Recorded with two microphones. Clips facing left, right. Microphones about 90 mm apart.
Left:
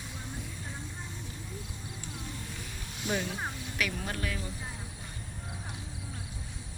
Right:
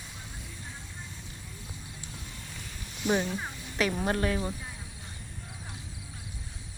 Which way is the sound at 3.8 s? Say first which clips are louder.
Right 7 dB; 35° right (ahead or behind).